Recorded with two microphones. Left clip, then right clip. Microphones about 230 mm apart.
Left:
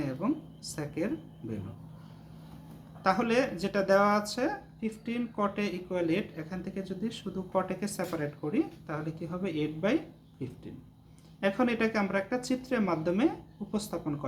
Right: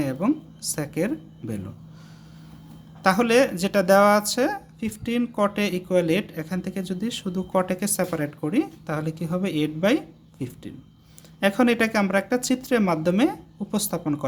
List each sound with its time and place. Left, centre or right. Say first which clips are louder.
0.0 s speech: right 8 dB; right
3.0 s speech: right 8 dB; right